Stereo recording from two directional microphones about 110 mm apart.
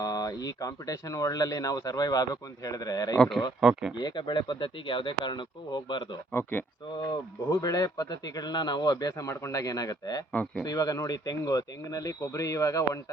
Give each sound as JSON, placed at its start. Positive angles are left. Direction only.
{"t": 0.0, "sound": "a man's voice", "side_deg": 35}
{"t": 3.2, "sound": "speech", "side_deg": 0}
{"t": 3.9, "sound": "speech", "side_deg": 40}
{"t": 6.3, "sound": "speech", "side_deg": 20}
{"t": 7.0, "sound": "a man's voice", "side_deg": 35}
{"t": 10.3, "sound": "speech", "side_deg": 10}
{"t": 10.6, "sound": "a man's voice", "side_deg": 35}